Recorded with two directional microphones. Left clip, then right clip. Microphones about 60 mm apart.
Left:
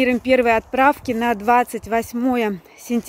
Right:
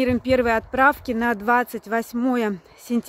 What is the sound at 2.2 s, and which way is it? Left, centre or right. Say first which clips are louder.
Speech: left 3 dB; right.